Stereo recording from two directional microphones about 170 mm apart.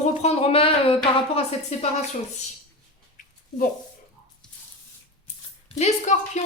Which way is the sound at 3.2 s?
50° left (ahead or behind).